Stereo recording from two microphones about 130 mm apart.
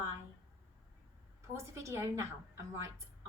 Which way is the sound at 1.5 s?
20° right (ahead or behind).